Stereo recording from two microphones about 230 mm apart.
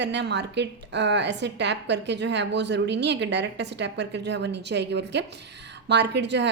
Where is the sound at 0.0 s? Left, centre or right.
Right.